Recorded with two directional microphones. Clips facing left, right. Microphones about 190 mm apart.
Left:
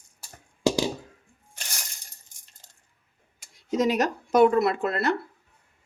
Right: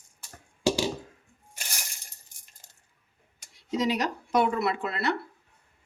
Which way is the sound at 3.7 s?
50° left (ahead or behind).